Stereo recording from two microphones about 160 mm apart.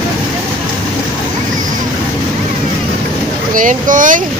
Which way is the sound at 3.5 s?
55° right (ahead or behind).